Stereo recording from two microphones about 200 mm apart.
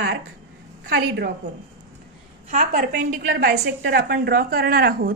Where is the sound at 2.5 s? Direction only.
40° right (ahead or behind).